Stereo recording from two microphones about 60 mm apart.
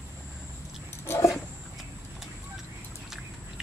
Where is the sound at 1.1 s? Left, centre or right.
Left.